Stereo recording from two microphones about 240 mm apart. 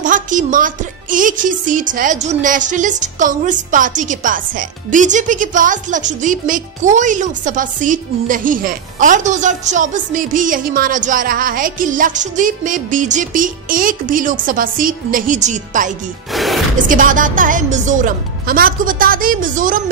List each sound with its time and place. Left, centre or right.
0.0 s speech: right
16.3 s music: centre
16.7 s speech: right